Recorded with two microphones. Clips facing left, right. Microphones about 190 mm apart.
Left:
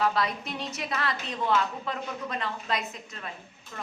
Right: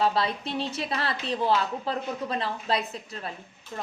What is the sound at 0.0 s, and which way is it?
A woman's voice, 30° right (ahead or behind).